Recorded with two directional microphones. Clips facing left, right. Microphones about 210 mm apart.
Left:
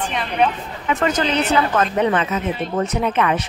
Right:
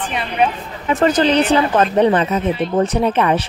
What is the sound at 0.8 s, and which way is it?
Speech, 35° right (ahead or behind).